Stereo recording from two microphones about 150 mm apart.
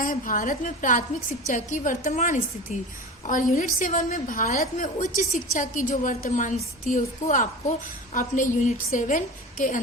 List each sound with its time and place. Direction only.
0.0 s a woman's voice: 65° left (ahead or behind)